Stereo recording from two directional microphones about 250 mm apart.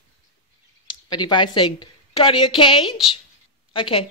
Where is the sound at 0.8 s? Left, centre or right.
Centre.